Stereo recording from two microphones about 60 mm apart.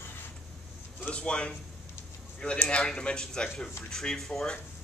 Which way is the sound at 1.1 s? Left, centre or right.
Centre.